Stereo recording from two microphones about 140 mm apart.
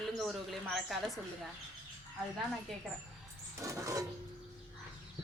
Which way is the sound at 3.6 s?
20° right (ahead or behind).